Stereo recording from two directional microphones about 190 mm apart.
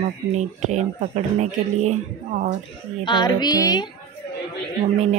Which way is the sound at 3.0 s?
25° left (ahead or behind).